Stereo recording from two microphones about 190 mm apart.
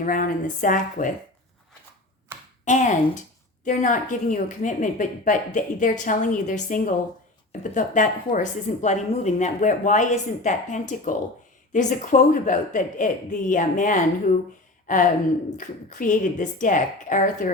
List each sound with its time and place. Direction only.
0.0 s a woman's voice: 45° left (ahead or behind)
2.3 s a sound: 10° right (ahead or behind)
2.6 s a woman's voice: 40° left (ahead or behind)